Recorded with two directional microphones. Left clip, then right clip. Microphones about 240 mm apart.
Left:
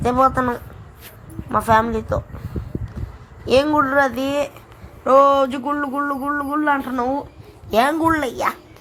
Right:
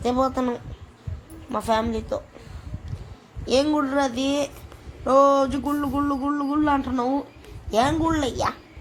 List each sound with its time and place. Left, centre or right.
0.0 s speech: centre
3.4 s a woman's voice: centre